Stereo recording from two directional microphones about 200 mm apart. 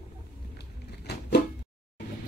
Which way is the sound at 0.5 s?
55° left (ahead or behind).